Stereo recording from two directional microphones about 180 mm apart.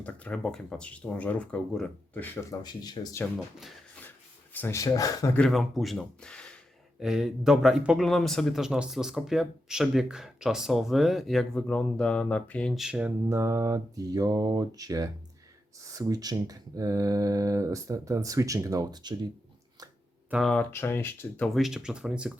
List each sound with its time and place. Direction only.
0.0 s speech: 5° left (ahead or behind)
3.3 s speech: centre (ahead or behind)
4.5 s speech: 15° left (ahead or behind)
5.4 s speech: centre (ahead or behind); by 19.1 s 20° right (ahead or behind)
20.3 s speech: 5° left (ahead or behind)